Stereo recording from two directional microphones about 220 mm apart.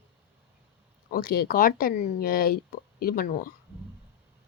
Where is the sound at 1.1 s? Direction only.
40° left (ahead or behind).